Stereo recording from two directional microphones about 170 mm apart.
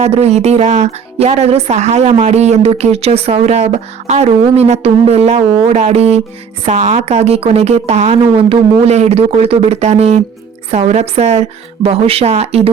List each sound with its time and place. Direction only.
0.0 s speech: 40° right (ahead or behind)